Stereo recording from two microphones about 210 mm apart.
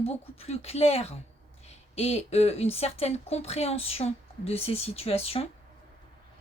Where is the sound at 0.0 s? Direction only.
30° left (ahead or behind).